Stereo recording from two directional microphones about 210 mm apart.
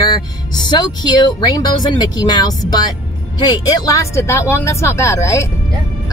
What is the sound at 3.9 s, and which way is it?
Speech, 15° left (ahead or behind).